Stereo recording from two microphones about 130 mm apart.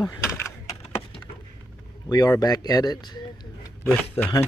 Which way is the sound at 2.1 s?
30° left (ahead or behind).